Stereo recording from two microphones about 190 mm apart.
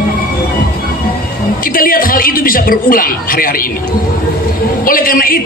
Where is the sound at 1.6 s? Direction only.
50° left (ahead or behind).